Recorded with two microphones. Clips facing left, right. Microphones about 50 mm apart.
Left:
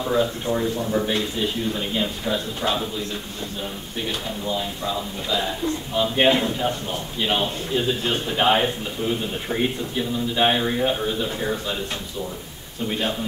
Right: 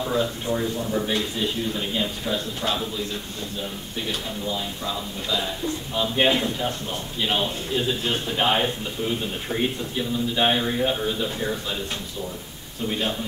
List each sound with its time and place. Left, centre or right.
0.0 s a man's voice: centre
4.1 s a man's voice: centre